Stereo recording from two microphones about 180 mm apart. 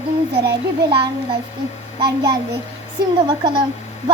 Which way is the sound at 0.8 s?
25° right (ahead or behind).